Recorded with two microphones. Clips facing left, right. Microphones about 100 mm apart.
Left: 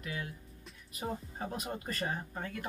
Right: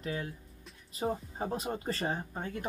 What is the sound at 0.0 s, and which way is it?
Speech, 30° right (ahead or behind).